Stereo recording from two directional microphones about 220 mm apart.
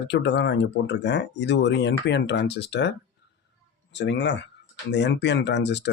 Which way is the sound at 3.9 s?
55° left (ahead or behind).